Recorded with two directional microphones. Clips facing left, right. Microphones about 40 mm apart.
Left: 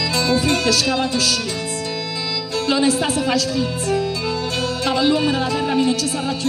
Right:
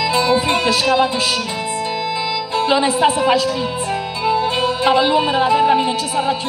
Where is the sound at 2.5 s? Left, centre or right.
Right.